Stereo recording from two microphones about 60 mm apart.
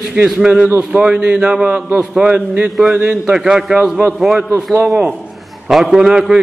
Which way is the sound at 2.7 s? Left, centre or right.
Centre.